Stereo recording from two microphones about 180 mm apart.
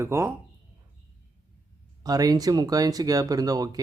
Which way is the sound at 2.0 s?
20° right (ahead or behind).